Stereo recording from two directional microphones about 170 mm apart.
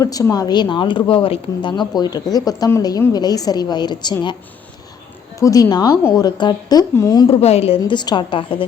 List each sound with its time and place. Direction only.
0.0 s speech: 20° left (ahead or behind)
5.4 s speech: 20° left (ahead or behind)
7.3 s a woman's voice: 40° left (ahead or behind)
7.8 s speech: 25° left (ahead or behind)